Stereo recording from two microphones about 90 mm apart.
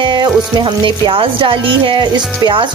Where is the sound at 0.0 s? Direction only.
60° right (ahead or behind).